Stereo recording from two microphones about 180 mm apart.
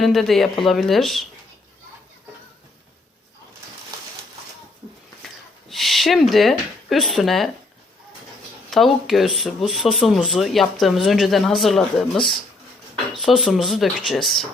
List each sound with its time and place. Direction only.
0.0 s speech: centre (ahead or behind)
5.2 s speech: centre (ahead or behind)
8.7 s speech: centre (ahead or behind)
13.1 s speech: centre (ahead or behind)